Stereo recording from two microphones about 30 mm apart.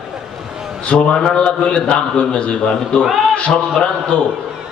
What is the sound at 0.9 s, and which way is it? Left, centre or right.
Speech, left.